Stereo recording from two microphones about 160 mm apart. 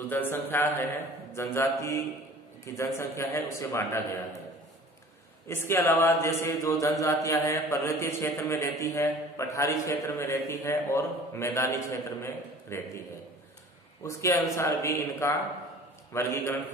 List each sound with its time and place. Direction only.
0.1 s speech: 15° left (ahead or behind)
5.5 s speech: 15° left (ahead or behind)
14.0 s a man's voice: 20° left (ahead or behind)